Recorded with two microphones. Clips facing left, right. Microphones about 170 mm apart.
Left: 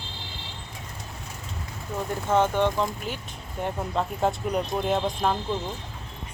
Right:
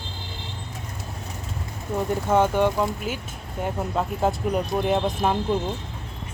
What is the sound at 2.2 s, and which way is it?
Speech, 10° right (ahead or behind).